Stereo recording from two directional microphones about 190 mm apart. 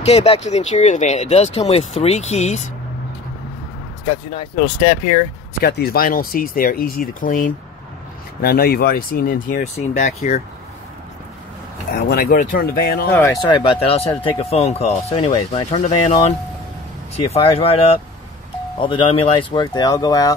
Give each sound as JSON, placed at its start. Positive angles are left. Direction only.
{"t": 0.0, "sound": "speech", "side_deg": 30}
{"t": 5.6, "sound": "speech", "side_deg": 55}
{"t": 9.8, "sound": "speech", "side_deg": 35}
{"t": 11.9, "sound": "speech", "side_deg": 55}
{"t": 13.5, "sound": "speech", "side_deg": 25}